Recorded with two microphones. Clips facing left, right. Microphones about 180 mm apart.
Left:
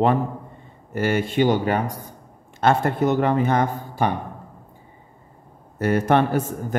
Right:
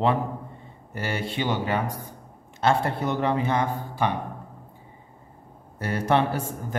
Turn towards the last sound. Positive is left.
turn(degrees=50)  # may be behind; listen again after turning